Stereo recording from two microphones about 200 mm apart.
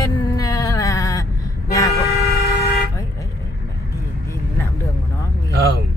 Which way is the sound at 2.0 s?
50° left (ahead or behind).